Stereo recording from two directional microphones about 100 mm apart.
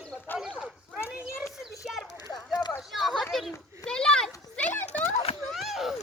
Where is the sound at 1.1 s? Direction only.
5° right (ahead or behind).